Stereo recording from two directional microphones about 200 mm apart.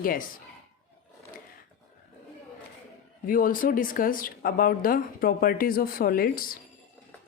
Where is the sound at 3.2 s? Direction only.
45° left (ahead or behind).